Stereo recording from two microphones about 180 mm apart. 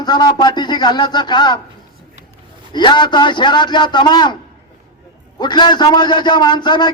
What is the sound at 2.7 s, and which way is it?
A man's voice, 25° left (ahead or behind).